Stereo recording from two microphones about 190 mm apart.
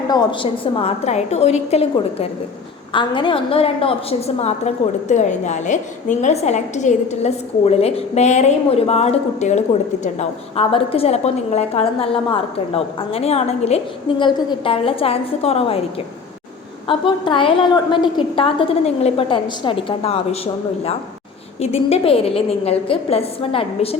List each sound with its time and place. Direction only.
0.1 s a woman's voice: 25° left (ahead or behind)